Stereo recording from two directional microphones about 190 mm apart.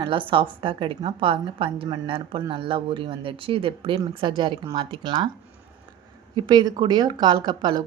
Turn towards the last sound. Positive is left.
turn(degrees=-25)  # may be behind; listen again after turning